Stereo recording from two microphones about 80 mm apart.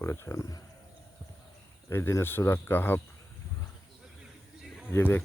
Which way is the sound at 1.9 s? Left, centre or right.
Left.